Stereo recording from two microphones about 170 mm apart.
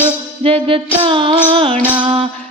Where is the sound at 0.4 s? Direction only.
35° right (ahead or behind).